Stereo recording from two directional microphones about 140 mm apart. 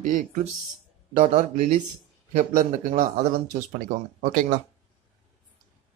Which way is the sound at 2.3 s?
70° right (ahead or behind).